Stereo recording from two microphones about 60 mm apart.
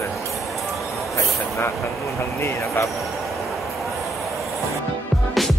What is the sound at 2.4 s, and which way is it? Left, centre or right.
Speech, left.